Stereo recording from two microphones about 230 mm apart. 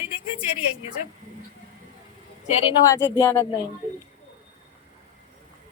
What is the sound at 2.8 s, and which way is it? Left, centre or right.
Speech, centre.